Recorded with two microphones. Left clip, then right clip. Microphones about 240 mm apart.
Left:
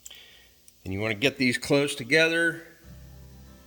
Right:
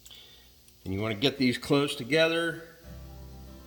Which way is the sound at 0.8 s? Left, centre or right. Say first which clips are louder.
Left 3 dB; left.